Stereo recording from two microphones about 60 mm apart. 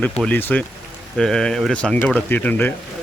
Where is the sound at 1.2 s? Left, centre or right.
Centre.